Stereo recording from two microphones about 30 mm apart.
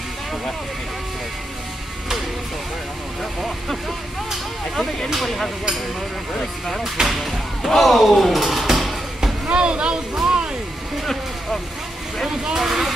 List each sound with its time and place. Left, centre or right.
3.3 s speech: centre
5.2 s speech: centre
7.1 s speech: centre
9.5 s speech: right
10.2 s music: right
12.5 s speech: centre